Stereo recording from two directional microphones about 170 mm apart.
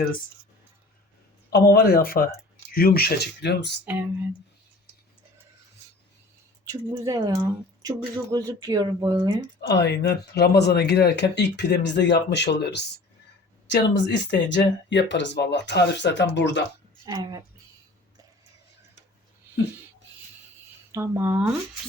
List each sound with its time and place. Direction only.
1.5 s speech: 60° left (ahead or behind)
3.8 s speech: 10° right (ahead or behind)
6.7 s speech: 20° right (ahead or behind)
9.6 s speech: 85° left
13.7 s speech: 90° left
17.1 s speech: 20° right (ahead or behind)
20.9 s speech: 15° right (ahead or behind)